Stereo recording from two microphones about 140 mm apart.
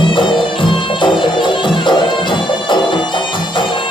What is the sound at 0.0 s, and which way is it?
Music, 35° left (ahead or behind).